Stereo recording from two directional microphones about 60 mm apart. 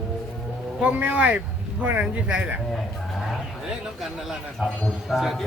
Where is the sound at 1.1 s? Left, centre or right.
Right.